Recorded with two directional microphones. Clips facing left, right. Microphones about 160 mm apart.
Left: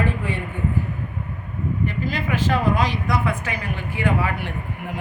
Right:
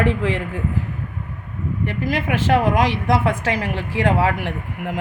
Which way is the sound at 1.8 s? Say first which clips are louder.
Right 6 dB; 75° right (ahead or behind).